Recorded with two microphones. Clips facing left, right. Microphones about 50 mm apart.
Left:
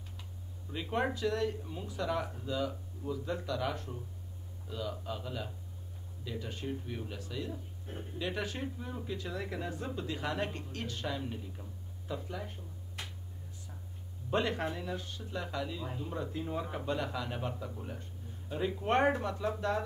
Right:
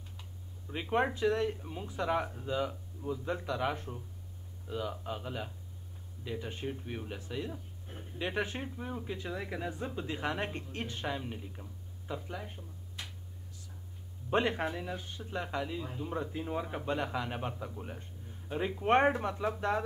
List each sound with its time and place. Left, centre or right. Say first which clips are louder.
0.7 s speech: right 2 dB; right
14.3 s speech: right 2 dB; right